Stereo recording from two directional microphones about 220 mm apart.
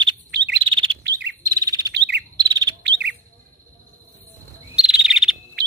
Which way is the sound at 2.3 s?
20° right (ahead or behind).